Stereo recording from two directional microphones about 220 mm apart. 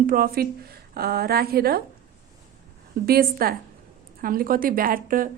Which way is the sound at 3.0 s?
40° right (ahead or behind).